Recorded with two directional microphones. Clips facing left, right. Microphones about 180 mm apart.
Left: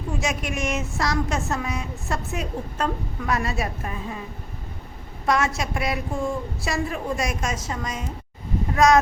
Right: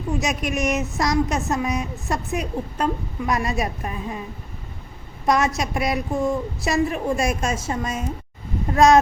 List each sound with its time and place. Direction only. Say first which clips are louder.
0.5 s speech: right 4 dB; 20° right (ahead or behind)
5.2 s a woman's voice: right 3 dB; 20° right (ahead or behind)